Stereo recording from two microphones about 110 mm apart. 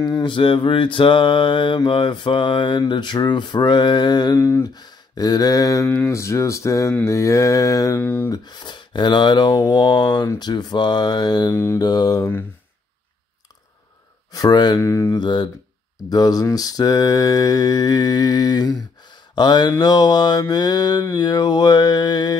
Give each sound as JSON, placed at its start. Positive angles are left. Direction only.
{"t": 0.0, "sound": "mantra", "side_deg": 40}
{"t": 4.4, "sound": "speech", "side_deg": 25}
{"t": 4.7, "sound": "speech", "side_deg": 35}
{"t": 8.0, "sound": "speech", "side_deg": 20}
{"t": 8.3, "sound": "mantra", "side_deg": 40}
{"t": 11.5, "sound": "speech", "side_deg": 25}
{"t": 11.8, "sound": "mantra", "side_deg": 35}
{"t": 14.3, "sound": "mantra", "side_deg": 40}
{"t": 14.8, "sound": "speech", "side_deg": 25}
{"t": 15.1, "sound": "mantra", "side_deg": 45}